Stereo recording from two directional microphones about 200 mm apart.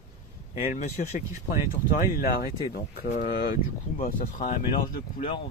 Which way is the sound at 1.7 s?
45° left (ahead or behind).